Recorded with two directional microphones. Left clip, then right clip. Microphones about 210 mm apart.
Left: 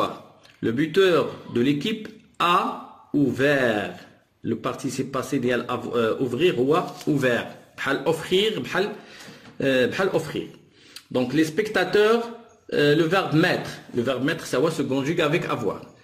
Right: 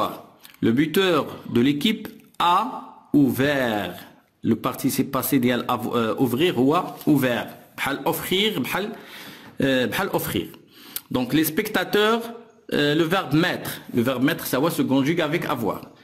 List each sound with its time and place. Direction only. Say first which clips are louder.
0.6 s speech: even; 50° right (ahead or behind)